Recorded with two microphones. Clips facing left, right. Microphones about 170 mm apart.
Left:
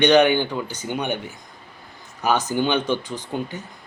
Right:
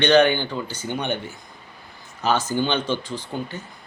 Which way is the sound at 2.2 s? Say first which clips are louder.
Left 1 dB; 15° left (ahead or behind).